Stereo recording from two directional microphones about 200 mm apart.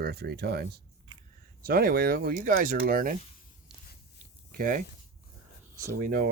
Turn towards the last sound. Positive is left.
turn(degrees=-45)  # may be behind; listen again after turning